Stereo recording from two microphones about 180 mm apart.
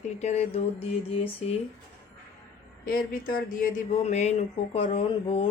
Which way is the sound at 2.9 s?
50° left (ahead or behind).